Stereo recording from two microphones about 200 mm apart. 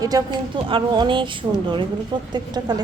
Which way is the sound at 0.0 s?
20° right (ahead or behind).